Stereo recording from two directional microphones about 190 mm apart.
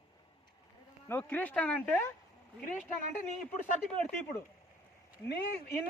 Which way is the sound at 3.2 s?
40° left (ahead or behind).